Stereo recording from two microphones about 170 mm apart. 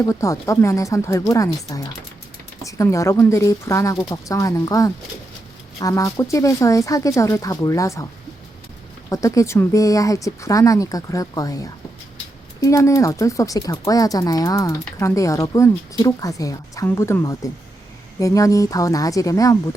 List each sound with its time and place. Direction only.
0.1 s speech: 20° left (ahead or behind)
9.0 s speech: 20° left (ahead or behind)